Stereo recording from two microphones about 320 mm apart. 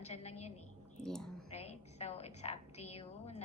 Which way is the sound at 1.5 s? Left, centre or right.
Centre.